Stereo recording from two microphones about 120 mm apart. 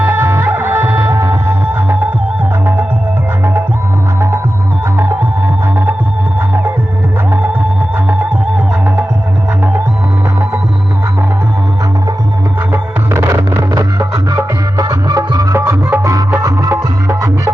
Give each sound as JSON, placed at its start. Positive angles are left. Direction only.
{"t": 0.0, "sound": "music", "side_deg": -20}
{"t": 4.9, "sound": "music", "side_deg": -20}
{"t": 7.3, "sound": "music", "side_deg": -15}
{"t": 12.7, "sound": "music", "side_deg": -20}
{"t": 15.5, "sound": "music", "side_deg": -20}